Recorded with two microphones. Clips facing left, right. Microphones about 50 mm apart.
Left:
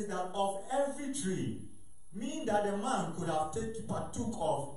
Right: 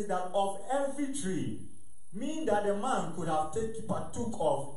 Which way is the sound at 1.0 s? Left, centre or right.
Centre.